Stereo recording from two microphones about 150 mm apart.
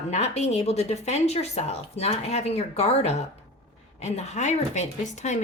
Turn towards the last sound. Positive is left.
turn(degrees=50)  # may be behind; listen again after turning